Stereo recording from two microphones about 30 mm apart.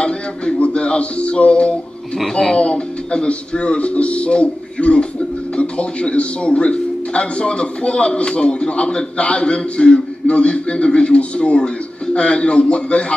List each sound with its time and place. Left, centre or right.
0.6 s a man's voice: left